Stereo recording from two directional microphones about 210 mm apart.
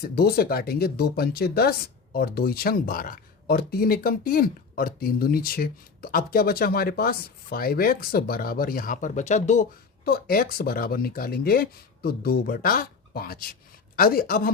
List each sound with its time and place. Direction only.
0.0 s speech: 45° left (ahead or behind)
10.1 s speech: 45° left (ahead or behind)